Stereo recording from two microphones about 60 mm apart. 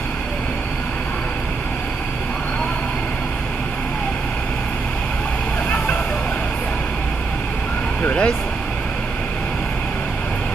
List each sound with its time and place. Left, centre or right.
8.0 s vehicle: centre